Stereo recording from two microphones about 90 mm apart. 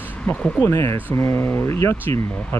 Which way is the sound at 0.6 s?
30° left (ahead or behind).